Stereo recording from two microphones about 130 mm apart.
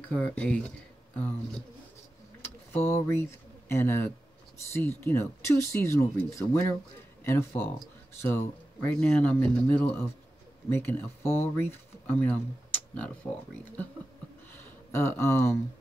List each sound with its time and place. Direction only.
0.1 s speech: 10° left (ahead or behind)
2.7 s speech: 20° left (ahead or behind)
14.6 s a sound: 20° left (ahead or behind)